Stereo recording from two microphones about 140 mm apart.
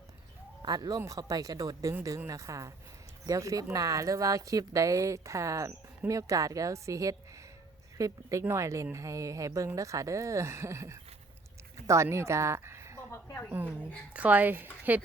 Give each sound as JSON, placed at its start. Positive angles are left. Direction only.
{"t": 0.6, "sound": "a woman's voice", "side_deg": -30}
{"t": 13.1, "sound": "a sound", "side_deg": 15}
{"t": 13.5, "sound": "a woman's voice", "side_deg": -10}